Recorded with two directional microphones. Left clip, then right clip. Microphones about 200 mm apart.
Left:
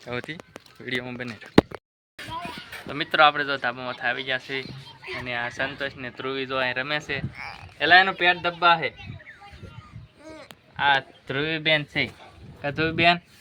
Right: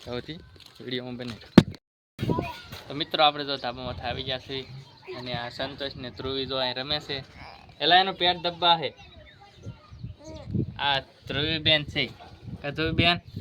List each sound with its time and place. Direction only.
0.1 s speech: 5° right (ahead or behind)
2.9 s speech: centre (ahead or behind)
10.8 s speech: 20° left (ahead or behind)